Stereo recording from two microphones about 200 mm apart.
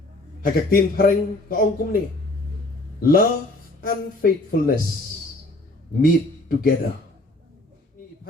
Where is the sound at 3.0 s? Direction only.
50° left (ahead or behind).